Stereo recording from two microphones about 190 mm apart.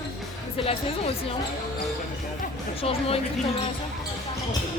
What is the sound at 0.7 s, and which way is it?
Speech, 30° left (ahead or behind).